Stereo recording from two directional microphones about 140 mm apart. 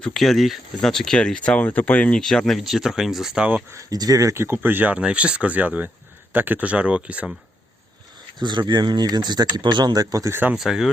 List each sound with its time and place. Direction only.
0.0 s speech: centre (ahead or behind)
3.7 s speech: 25° right (ahead or behind)
8.4 s speech: 35° right (ahead or behind); by 10.6 s 15° right (ahead or behind)
10.6 s speech: centre (ahead or behind)